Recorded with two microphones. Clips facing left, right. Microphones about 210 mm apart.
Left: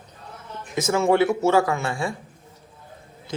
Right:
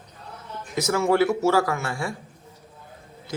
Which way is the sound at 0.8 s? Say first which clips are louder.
Left 1 dB; 20° left (ahead or behind).